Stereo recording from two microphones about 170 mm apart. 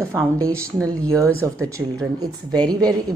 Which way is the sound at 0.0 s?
15° right (ahead or behind).